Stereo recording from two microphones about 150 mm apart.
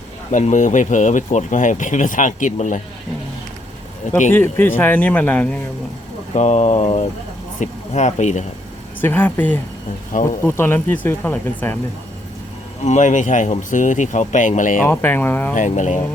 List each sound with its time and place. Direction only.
0.3 s speech: 55° left (ahead or behind)
4.3 s speech: 15° left (ahead or behind)
6.3 s speech: 50° left (ahead or behind)
9.0 s speech: 15° left (ahead or behind)
12.8 s speech: 55° left (ahead or behind)
14.8 s speech: 15° left (ahead or behind)
15.5 s speech: 55° left (ahead or behind)